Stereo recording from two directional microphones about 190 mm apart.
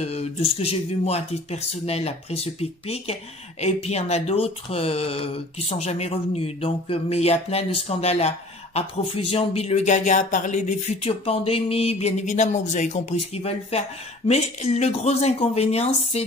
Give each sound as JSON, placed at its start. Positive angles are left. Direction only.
{"t": 0.0, "sound": "speech", "side_deg": 35}